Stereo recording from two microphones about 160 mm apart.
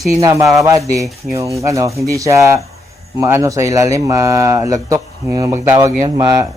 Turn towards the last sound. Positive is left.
turn(degrees=-20)  # may be behind; listen again after turning